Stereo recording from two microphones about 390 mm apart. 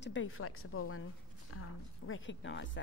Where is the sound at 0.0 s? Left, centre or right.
Left.